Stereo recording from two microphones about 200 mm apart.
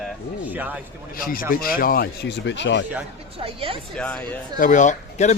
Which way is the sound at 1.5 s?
45° left (ahead or behind).